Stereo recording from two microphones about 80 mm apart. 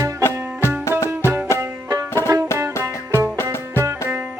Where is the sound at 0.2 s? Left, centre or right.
Left.